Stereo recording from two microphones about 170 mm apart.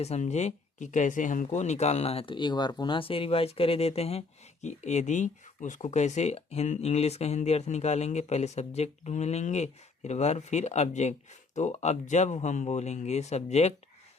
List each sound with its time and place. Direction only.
0.0 s speech: 40° left (ahead or behind)